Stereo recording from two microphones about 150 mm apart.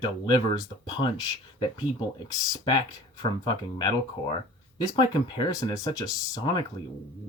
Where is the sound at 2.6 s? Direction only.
30° left (ahead or behind).